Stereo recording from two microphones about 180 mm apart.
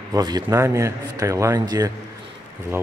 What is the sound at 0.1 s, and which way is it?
A man's voice, 20° right (ahead or behind).